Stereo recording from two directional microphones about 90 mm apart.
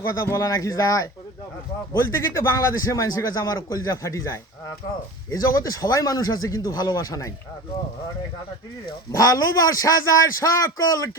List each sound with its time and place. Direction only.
0.0 s a man's voice: 30° left (ahead or behind)
9.1 s a man's voice: 40° left (ahead or behind)